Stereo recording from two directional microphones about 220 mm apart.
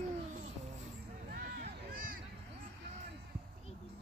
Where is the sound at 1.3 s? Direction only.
40° right (ahead or behind).